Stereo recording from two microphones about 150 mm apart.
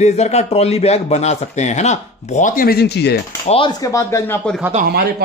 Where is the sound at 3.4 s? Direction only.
40° left (ahead or behind).